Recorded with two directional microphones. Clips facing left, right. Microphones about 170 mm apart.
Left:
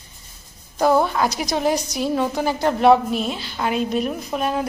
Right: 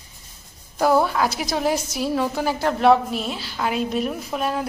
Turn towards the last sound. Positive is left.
turn(degrees=0)  # may be behind; listen again after turning